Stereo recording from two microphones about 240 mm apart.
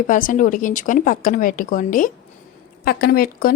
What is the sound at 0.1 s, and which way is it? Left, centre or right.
A woman's voice, left.